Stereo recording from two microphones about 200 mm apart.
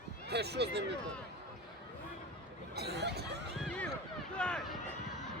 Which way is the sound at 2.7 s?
55° right (ahead or behind).